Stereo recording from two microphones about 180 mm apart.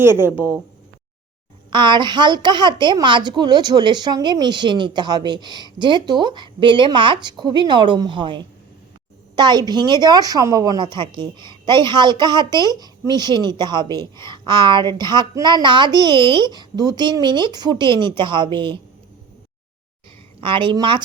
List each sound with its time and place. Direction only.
0.2 s speech: 10° right (ahead or behind)
1.7 s a woman's voice: 25° right (ahead or behind)
20.4 s a woman's voice: 30° right (ahead or behind)